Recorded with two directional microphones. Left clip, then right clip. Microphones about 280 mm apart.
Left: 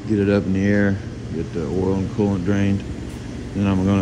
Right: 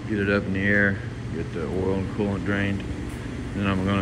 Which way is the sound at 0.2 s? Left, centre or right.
Centre.